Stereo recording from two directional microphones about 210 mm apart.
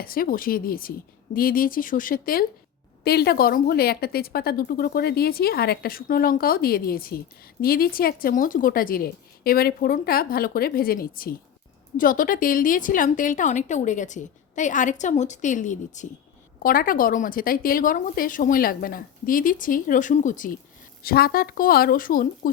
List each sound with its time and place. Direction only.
0.0 s a woman's voice: 45° left (ahead or behind)